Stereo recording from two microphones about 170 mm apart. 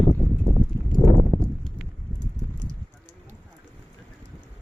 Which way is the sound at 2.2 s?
50° right (ahead or behind).